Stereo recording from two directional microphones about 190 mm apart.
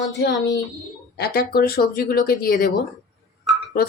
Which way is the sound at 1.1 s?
55° left (ahead or behind).